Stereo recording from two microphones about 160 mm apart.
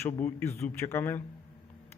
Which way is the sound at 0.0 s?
20° left (ahead or behind).